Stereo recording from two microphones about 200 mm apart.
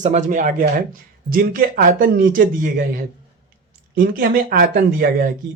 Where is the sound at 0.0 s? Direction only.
40° right (ahead or behind).